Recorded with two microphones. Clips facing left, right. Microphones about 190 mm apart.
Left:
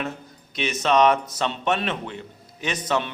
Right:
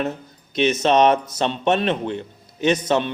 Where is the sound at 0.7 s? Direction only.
20° right (ahead or behind).